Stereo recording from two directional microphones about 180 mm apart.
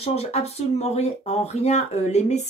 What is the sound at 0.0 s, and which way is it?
Speech, 35° left (ahead or behind).